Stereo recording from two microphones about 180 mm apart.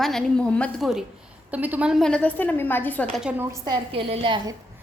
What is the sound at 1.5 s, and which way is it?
A woman's voice, 10° right (ahead or behind).